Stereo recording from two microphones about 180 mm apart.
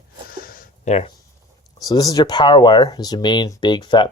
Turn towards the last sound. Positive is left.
turn(degrees=25)  # may be behind; listen again after turning